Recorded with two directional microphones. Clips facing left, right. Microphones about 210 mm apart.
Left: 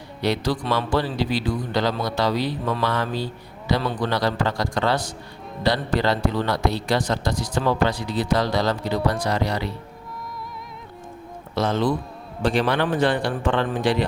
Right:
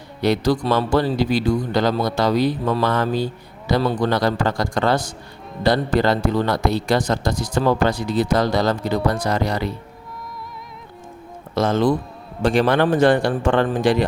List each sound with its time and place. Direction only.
0.2 s speech: 45° right (ahead or behind)
11.5 s speech: 45° right (ahead or behind)